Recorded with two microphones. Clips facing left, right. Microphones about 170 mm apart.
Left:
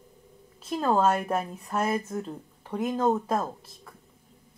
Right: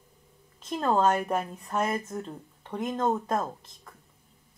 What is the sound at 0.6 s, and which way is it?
Speech, 5° left (ahead or behind).